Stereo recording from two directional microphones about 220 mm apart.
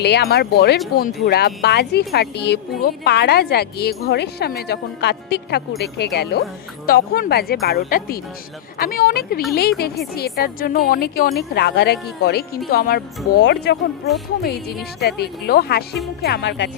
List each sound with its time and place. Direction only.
0.0 s a woman's voice: 50° left (ahead or behind)